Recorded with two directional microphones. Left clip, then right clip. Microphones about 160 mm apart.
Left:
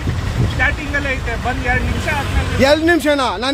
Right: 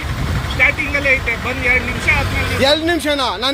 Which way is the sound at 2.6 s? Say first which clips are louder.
Left 3 dB; 45° left (ahead or behind).